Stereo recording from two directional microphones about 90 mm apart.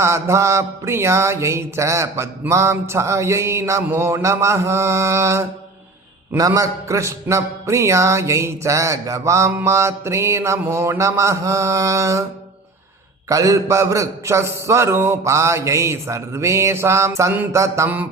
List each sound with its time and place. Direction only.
0.0 s a man's voice: 30° right (ahead or behind)
13.2 s a man's voice: 40° right (ahead or behind)
17.8 s a sound: 20° right (ahead or behind)